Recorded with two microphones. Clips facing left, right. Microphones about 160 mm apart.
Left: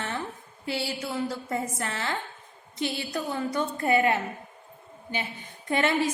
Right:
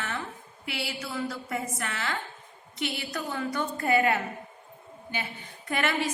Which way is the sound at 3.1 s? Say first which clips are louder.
Left 3 dB; 25° left (ahead or behind).